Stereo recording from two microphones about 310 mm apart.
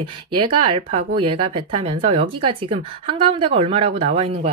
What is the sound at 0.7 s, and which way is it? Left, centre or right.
Speech, centre.